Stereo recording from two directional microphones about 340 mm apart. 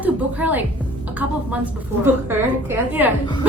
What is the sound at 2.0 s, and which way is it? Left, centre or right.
A woman's voice, centre.